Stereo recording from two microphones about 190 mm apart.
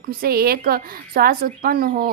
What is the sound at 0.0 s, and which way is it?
Speech, 50° right (ahead or behind).